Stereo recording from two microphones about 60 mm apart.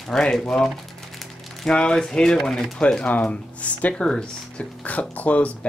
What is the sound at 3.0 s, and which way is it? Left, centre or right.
Speech, left.